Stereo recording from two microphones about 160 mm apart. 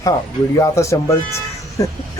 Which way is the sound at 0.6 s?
20° left (ahead or behind).